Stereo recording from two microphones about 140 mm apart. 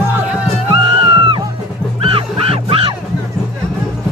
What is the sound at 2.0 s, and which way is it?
Music, 40° right (ahead or behind).